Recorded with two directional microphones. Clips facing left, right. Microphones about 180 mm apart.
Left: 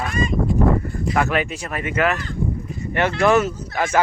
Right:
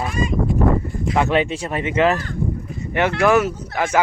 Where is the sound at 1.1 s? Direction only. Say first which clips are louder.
Right 3 dB; 25° right (ahead or behind).